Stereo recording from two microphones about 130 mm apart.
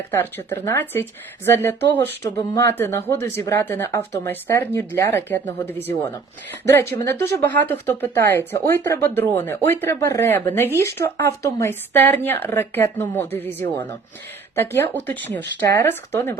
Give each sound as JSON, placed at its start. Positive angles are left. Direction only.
{"t": 0.1, "sound": "speech", "side_deg": 15}